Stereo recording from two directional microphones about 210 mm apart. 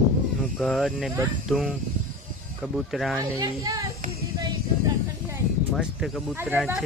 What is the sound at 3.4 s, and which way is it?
Speech, 15° right (ahead or behind).